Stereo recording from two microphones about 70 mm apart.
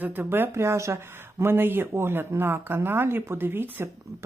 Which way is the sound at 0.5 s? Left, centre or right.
Right.